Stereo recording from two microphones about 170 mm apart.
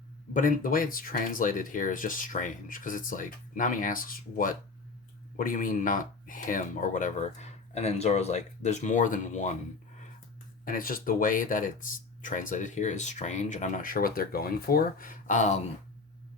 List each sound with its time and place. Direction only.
0.3 s speech: 50° left (ahead or behind)
10.7 s speech: 55° left (ahead or behind)